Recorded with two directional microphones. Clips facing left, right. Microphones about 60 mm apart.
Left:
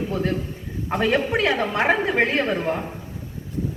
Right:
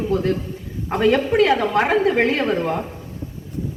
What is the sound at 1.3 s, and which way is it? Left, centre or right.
A woman's voice, centre.